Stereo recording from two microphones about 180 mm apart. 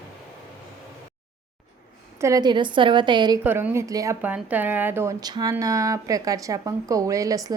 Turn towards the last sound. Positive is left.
turn(degrees=-20)  # may be behind; listen again after turning